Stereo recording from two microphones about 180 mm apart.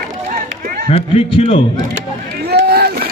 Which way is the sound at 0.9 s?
30° left (ahead or behind).